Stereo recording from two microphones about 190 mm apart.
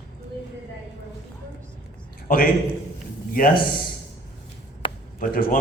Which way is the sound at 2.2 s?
45° left (ahead or behind).